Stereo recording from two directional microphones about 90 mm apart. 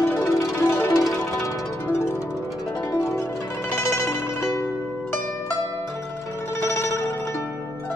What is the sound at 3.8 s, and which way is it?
Music, 30° left (ahead or behind).